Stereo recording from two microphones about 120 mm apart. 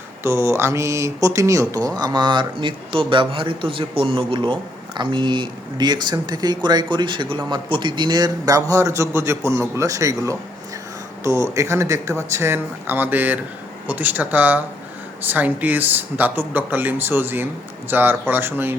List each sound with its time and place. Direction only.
0.2 s speech: 20° right (ahead or behind)